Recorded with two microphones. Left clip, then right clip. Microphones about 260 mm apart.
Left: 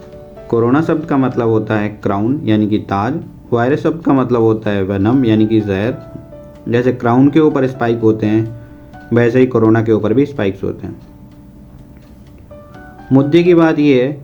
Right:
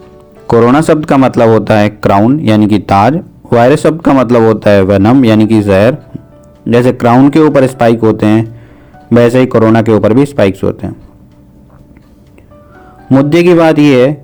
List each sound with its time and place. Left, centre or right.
0.4 s speech: right
13.3 s speech: right